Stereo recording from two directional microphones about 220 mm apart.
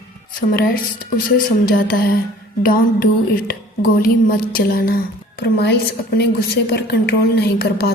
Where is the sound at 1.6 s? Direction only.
40° left (ahead or behind).